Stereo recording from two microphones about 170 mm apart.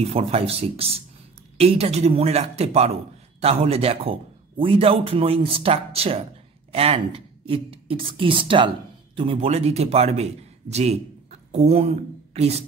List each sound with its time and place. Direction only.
0.1 s a man's voice: 35° right (ahead or behind)